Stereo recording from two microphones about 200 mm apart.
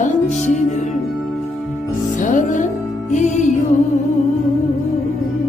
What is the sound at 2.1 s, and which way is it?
Music, 40° left (ahead or behind).